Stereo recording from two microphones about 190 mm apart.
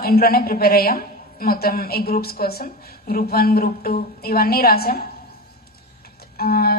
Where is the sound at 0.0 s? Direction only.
55° left (ahead or behind).